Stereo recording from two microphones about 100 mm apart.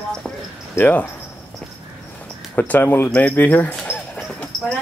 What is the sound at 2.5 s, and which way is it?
Speech, 20° left (ahead or behind).